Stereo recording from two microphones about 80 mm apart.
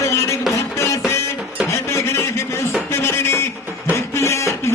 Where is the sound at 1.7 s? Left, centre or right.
Left.